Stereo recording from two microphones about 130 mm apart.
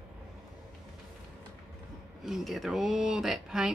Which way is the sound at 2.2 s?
Centre (ahead or behind).